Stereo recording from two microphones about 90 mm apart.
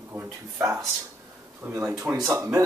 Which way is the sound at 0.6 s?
35° right (ahead or behind).